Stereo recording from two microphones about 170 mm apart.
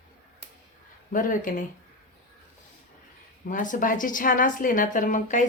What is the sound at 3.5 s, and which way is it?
A woman's voice, 50° left (ahead or behind).